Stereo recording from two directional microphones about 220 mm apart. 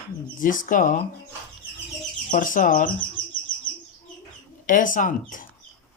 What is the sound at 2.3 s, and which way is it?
Speech, 35° left (ahead or behind).